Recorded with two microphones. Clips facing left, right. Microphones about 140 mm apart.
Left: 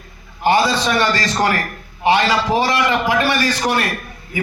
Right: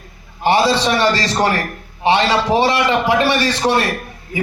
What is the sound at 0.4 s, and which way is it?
A man's voice, 30° right (ahead or behind).